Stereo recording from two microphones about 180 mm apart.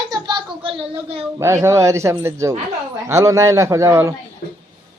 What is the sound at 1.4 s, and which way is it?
A man's voice, 15° right (ahead or behind).